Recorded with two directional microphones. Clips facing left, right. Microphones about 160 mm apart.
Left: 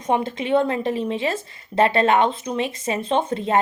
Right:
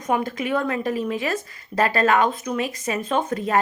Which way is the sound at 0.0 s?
25° left (ahead or behind).